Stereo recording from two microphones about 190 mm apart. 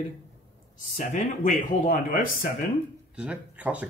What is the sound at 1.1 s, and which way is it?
Speech, 45° left (ahead or behind).